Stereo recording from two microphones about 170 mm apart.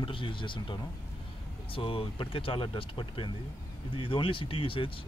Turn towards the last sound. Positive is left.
turn(degrees=30)  # may be behind; listen again after turning